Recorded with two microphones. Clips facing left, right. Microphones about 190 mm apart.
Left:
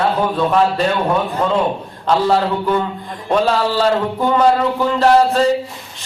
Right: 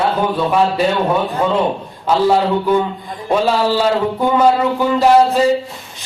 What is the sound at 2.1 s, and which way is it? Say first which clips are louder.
A man's voice: right 2 dB; 5° right (ahead or behind).